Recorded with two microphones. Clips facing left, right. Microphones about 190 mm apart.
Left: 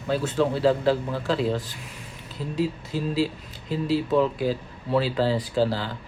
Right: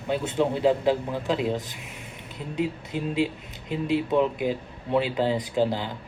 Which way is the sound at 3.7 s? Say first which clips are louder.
Left 1 dB; 35° left (ahead or behind).